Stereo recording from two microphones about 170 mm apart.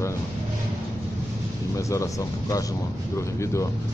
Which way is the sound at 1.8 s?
20° left (ahead or behind).